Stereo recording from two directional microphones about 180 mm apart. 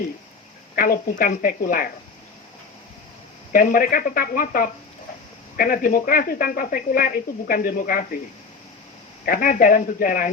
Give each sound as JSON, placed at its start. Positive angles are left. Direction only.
{"t": 0.8, "sound": "speech", "side_deg": 50}
{"t": 3.5, "sound": "speech", "side_deg": 50}
{"t": 9.2, "sound": "speech", "side_deg": 50}